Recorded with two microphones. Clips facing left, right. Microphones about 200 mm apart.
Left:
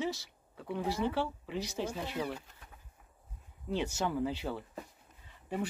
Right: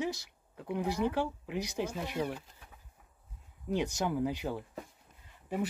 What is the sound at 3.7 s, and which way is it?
Speech, 15° right (ahead or behind).